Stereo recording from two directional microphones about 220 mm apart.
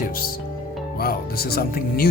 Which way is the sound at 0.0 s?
40° left (ahead or behind).